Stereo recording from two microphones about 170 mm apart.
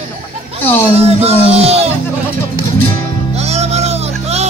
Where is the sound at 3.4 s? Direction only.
40° right (ahead or behind).